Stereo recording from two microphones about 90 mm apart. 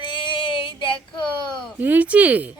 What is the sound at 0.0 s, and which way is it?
Female singing, 65° left (ahead or behind).